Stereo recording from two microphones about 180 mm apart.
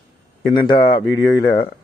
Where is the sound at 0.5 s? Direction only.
25° left (ahead or behind).